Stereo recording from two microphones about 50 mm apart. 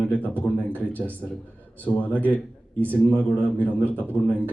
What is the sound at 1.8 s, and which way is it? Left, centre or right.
Speech, left.